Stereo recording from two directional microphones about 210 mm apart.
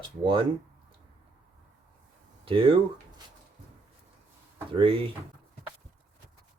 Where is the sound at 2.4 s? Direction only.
25° right (ahead or behind).